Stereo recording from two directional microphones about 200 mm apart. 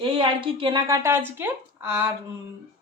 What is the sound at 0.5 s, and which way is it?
A woman's voice, 20° right (ahead or behind).